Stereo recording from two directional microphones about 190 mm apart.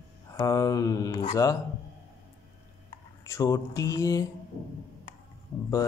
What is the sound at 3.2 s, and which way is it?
Speech, 15° left (ahead or behind).